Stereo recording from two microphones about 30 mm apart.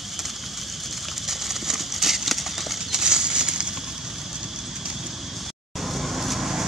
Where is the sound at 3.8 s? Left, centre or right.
Centre.